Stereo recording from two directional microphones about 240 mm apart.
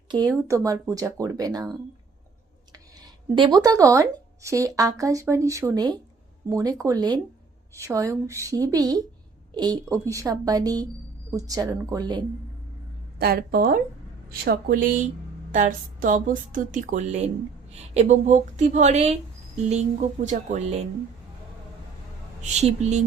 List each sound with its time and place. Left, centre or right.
0.1 s speech: centre
3.3 s speech: centre
13.1 s a woman's voice: right
20.2 s speech: right
22.4 s speech: right